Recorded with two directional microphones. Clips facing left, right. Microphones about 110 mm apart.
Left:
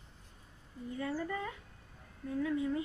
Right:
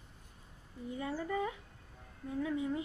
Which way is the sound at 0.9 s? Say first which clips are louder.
Even; 15° right (ahead or behind).